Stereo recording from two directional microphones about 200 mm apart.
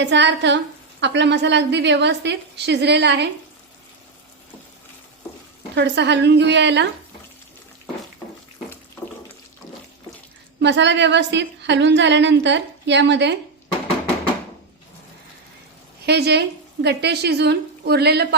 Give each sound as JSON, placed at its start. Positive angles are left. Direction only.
{"t": 0.0, "sound": "a woman's voice", "side_deg": -60}
{"t": 5.7, "sound": "a woman's voice", "side_deg": -60}
{"t": 10.6, "sound": "a woman's voice", "side_deg": -60}
{"t": 16.0, "sound": "a woman's voice", "side_deg": -55}